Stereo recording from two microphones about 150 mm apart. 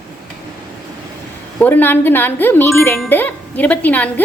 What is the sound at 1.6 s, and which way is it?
A woman's voice, 15° left (ahead or behind).